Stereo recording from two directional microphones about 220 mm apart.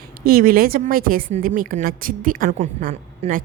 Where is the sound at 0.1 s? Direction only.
40° right (ahead or behind).